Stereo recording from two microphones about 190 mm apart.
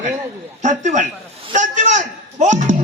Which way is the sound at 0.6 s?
40° right (ahead or behind).